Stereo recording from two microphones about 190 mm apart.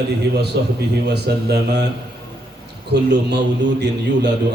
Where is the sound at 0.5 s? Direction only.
60° right (ahead or behind).